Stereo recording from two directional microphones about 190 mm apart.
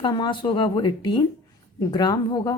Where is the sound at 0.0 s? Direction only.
25° left (ahead or behind).